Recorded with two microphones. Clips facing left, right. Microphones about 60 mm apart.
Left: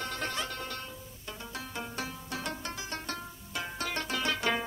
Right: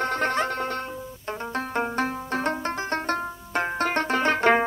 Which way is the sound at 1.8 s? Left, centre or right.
Right.